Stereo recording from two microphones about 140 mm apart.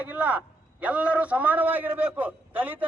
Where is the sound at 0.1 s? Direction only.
10° right (ahead or behind).